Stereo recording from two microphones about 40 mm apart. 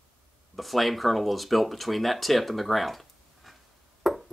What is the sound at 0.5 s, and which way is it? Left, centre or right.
Speech, centre.